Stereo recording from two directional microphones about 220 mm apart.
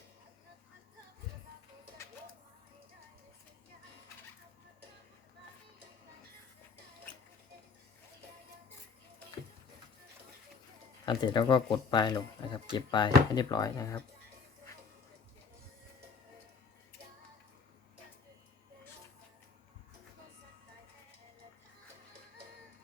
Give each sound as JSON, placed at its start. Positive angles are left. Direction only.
{"t": 11.0, "sound": "speech", "side_deg": 20}